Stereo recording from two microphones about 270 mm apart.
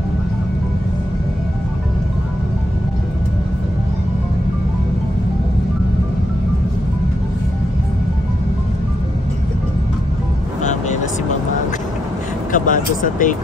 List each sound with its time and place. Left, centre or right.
10.6 s vehicle: left
12.5 s vehicle: left